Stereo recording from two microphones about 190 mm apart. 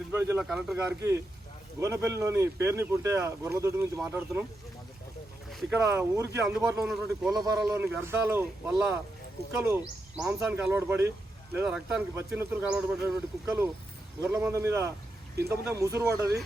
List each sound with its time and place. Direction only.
0.1 s speech: 10° right (ahead or behind)
1.8 s speech: 15° right (ahead or behind)
5.7 s speech: 10° right (ahead or behind)
7.8 s speech: 10° right (ahead or behind)